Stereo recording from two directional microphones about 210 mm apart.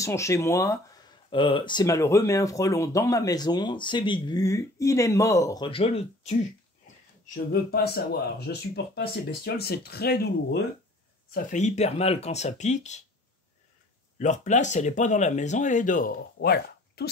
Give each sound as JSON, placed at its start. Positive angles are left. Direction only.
{"t": 0.0, "sound": "speech", "side_deg": 15}
{"t": 7.3, "sound": "speech", "side_deg": 50}
{"t": 11.3, "sound": "speech", "side_deg": 35}
{"t": 14.1, "sound": "speech", "side_deg": 35}